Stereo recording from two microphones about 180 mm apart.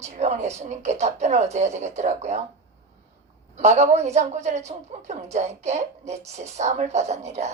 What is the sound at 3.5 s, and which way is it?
A woman's voice, 40° right (ahead or behind).